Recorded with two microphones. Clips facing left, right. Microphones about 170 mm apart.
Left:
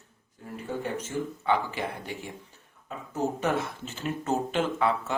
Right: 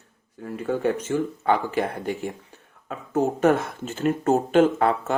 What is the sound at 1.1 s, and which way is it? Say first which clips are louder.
Speech: right 6 dB; 90° right.